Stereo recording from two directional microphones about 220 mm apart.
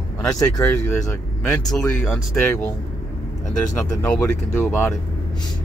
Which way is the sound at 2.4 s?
10° left (ahead or behind).